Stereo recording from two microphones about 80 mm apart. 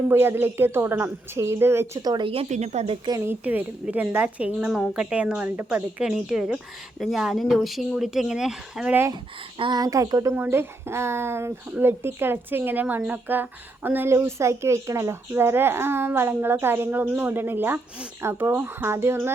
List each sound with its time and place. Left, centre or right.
0.1 s speech: right
2.0 s speech: right
3.4 s a woman's voice: centre
9.6 s speech: right
9.8 s speech: right
10.3 s a woman's voice: right